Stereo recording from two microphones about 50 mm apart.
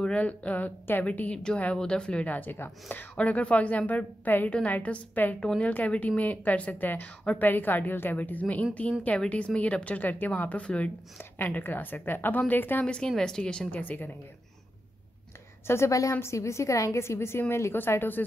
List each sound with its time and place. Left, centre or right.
0.0 s a woman's voice: left
1.3 s speech: centre
2.2 s a woman's voice: left
3.2 s a woman's voice: left
6.7 s a woman's voice: left
8.2 s a woman's voice: left
11.4 s a woman's voice: left
12.8 s speech: centre
13.7 s a woman's voice: left
15.6 s a woman's voice: left
17.7 s speech: left